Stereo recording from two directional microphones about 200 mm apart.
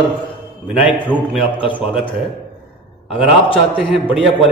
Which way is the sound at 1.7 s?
5° right (ahead or behind).